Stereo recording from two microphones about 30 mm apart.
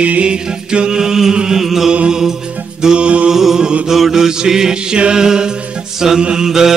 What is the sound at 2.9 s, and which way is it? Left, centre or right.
Mantra, right.